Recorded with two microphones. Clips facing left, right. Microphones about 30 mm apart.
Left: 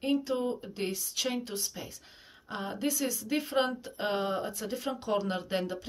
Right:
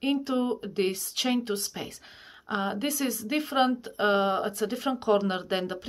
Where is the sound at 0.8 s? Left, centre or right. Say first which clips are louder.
Right 2 dB; right.